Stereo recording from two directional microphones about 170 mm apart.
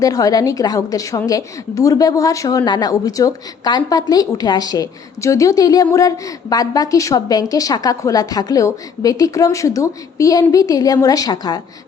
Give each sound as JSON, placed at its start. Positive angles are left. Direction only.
{"t": 0.0, "sound": "a woman's voice", "side_deg": 20}